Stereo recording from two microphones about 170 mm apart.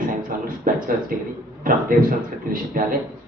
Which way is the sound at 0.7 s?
55° right (ahead or behind).